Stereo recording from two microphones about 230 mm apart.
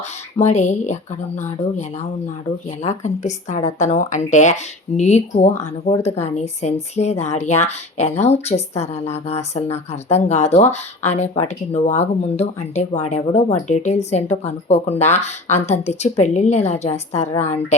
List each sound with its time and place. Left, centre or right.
0.3 s a woman's voice: left